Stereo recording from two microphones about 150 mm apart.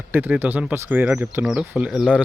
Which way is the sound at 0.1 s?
10° right (ahead or behind).